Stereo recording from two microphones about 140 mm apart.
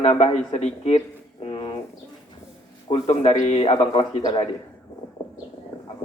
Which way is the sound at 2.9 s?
45° left (ahead or behind).